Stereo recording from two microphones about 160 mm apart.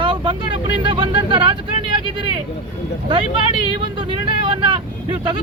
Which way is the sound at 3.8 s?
30° right (ahead or behind).